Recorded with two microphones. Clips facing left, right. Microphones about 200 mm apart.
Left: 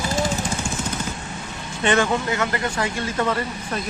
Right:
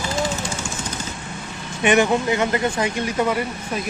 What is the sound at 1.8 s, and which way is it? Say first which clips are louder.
Speech: right 3 dB; 15° right (ahead or behind).